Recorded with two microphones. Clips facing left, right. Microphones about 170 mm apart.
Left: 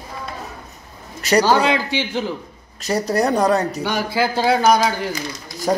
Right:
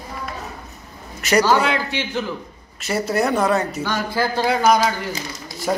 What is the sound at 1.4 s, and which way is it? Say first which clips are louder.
Speech: left 2 dB; 15° left (ahead or behind).